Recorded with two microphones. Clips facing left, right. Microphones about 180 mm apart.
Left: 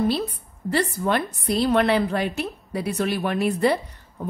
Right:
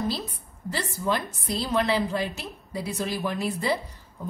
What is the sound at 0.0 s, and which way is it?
A woman's voice, 65° left (ahead or behind).